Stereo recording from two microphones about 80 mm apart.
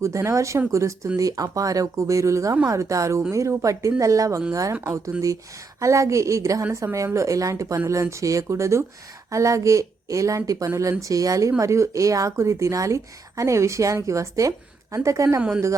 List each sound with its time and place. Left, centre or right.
0.0 s speech: right
5.1 s speech: centre
5.8 s speech: right
15.4 s speech: centre